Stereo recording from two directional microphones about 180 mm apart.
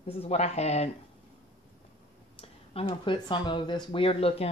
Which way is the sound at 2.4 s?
35° left (ahead or behind).